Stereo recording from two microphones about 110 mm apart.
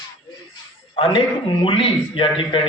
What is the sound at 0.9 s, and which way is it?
A man's voice, 50° left (ahead or behind).